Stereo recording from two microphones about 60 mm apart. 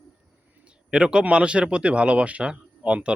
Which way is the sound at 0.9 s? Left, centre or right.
Centre.